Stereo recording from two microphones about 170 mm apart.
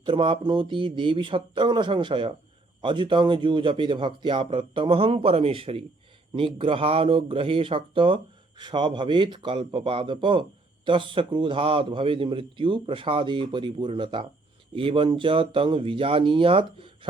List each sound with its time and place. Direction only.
0.0 s speech: 30° right (ahead or behind)